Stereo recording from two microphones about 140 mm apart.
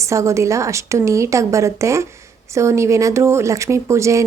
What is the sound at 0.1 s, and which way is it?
Speech, 20° right (ahead or behind).